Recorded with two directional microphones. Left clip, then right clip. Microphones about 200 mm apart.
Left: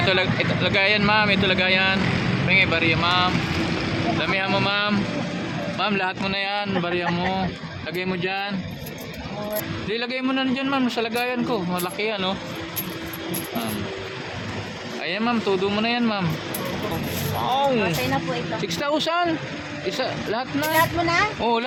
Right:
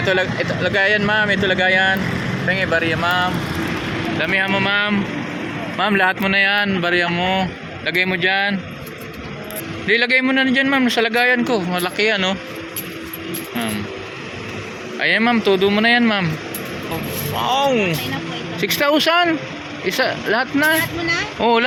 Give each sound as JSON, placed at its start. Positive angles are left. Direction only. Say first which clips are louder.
{"t": 0.0, "sound": "a man's voice", "louder": "right 2 dB", "side_deg": -20}
{"t": 9.9, "sound": "a man's voice", "louder": "right 11 dB", "side_deg": -30}
{"t": 15.0, "sound": "a man's voice", "louder": "right 8 dB", "side_deg": -35}
{"t": 17.3, "sound": "speech", "louder": "right 4 dB", "side_deg": -15}
{"t": 18.6, "sound": "speech", "louder": "right 10 dB", "side_deg": -30}